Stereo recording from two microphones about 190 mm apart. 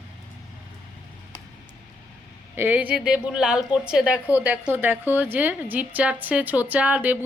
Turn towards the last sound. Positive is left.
turn(degrees=-5)  # may be behind; listen again after turning